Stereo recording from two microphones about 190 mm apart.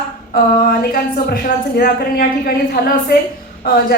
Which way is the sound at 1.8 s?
50° left (ahead or behind).